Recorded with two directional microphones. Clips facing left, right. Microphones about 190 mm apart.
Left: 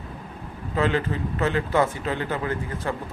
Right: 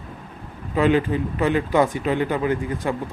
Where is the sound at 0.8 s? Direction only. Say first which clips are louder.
Right 5 dB; 15° right (ahead or behind).